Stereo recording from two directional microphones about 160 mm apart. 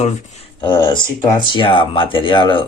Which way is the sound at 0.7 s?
30° left (ahead or behind).